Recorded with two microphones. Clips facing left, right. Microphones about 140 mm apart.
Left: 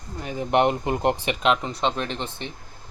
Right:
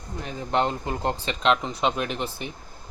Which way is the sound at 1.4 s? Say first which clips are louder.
Even; 5° left (ahead or behind).